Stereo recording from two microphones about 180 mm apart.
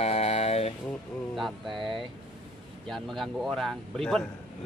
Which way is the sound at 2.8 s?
Centre (ahead or behind).